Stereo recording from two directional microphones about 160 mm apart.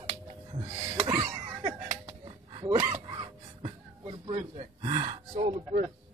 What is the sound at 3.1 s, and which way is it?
Gasp, 30° right (ahead or behind).